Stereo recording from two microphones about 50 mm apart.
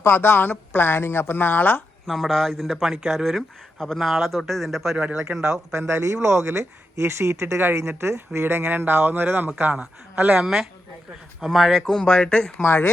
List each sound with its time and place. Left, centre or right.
0.0 s speech: left
1.0 s speech: left
2.0 s speech: centre
3.2 s speech: centre
5.5 s speech: right
7.4 s speech: right
7.8 s speech: right
10.3 s speech: centre
11.8 s speech: centre